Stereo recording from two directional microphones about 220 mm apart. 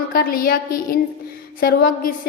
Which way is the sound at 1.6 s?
40° left (ahead or behind).